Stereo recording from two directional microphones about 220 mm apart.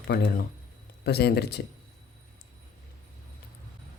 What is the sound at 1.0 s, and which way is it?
Speech, 50° left (ahead or behind).